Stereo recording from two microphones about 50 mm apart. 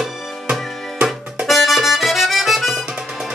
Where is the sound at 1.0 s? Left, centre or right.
Centre.